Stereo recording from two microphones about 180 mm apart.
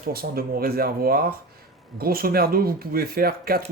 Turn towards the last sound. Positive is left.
turn(degrees=-55)  # may be behind; listen again after turning